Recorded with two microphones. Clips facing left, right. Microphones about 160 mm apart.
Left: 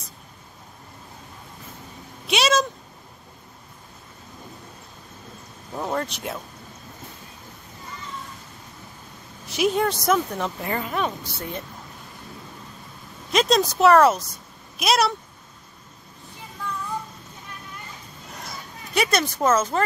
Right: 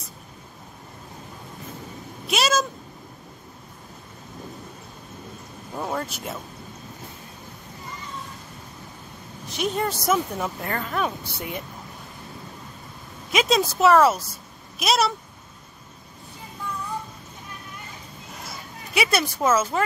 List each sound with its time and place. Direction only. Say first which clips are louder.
2.2 s cat: left 2 dB; centre (ahead or behind)
5.8 s a sound: left 2 dB; centre (ahead or behind)
9.5 s a woman's voice: left 4 dB; centre (ahead or behind)
10.7 s speech: left 2 dB; 10° left (ahead or behind)
11.2 s speech: even; 15° right (ahead or behind)
13.3 s a woman's voice: left 1 dB; 5° right (ahead or behind)
18.9 s speech: left 1 dB; 5° right (ahead or behind)